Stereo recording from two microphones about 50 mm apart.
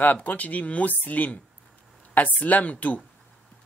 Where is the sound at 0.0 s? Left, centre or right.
Left.